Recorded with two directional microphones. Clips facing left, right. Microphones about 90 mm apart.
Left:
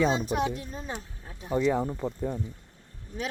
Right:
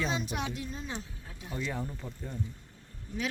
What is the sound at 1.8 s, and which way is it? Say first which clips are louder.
Speech: left 10 dB; 70° left (ahead or behind).